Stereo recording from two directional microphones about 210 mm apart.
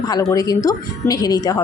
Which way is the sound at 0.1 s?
15° left (ahead or behind).